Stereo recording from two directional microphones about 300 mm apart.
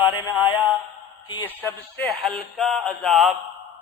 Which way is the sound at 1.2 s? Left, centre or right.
Centre.